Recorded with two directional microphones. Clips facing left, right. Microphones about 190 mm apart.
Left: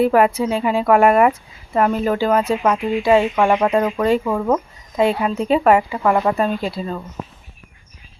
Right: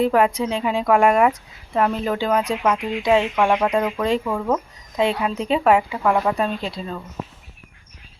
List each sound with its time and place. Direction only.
0.0 s speech: 5° left (ahead or behind)